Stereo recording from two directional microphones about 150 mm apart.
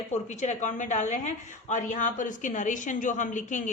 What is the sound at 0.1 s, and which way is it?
A woman's voice, 50° left (ahead or behind).